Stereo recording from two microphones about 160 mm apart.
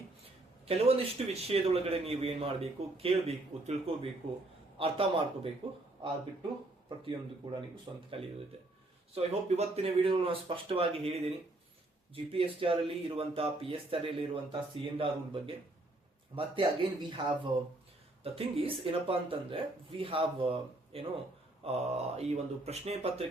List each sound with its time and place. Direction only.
0.7 s speech: 40° right (ahead or behind)
7.9 s speech: 25° right (ahead or behind)
9.1 s speech: 40° right (ahead or behind)